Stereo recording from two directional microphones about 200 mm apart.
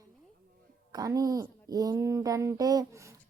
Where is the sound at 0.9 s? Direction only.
15° right (ahead or behind).